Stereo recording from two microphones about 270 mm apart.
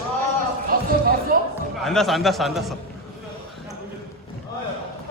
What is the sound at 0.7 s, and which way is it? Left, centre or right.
Music, right.